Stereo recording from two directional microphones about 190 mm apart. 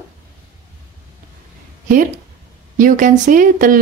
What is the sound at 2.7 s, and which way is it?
A woman's voice, 45° right (ahead or behind).